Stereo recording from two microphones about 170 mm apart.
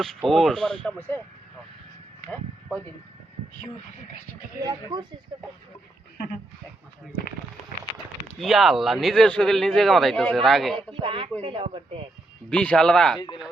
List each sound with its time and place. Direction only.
0.3 s speech: centre (ahead or behind)
4.6 s speech: 25° right (ahead or behind)
8.4 s speech: centre (ahead or behind)
10.8 s speech: 30° right (ahead or behind)
12.5 s speech: 5° left (ahead or behind)